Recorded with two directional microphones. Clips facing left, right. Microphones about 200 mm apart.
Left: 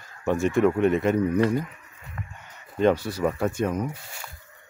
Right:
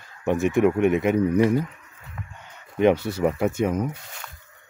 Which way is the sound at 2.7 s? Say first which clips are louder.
Right 2 dB; 20° right (ahead or behind).